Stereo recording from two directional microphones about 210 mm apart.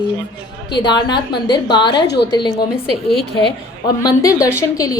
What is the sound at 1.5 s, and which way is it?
Speech, 20° left (ahead or behind).